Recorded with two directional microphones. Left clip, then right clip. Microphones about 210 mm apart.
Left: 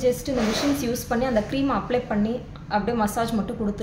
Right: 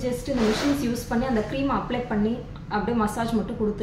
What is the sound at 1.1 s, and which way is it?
Speech, 55° left (ahead or behind).